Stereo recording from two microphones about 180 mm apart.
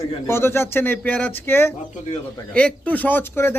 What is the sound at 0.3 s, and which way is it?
A man's voice, 15° left (ahead or behind).